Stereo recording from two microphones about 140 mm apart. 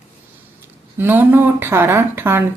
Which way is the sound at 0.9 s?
15° right (ahead or behind).